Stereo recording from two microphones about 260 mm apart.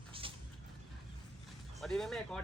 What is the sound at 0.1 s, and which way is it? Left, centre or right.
Vehicle, right.